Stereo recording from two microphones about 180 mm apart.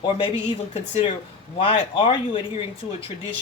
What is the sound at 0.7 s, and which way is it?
Speech, 35° left (ahead or behind).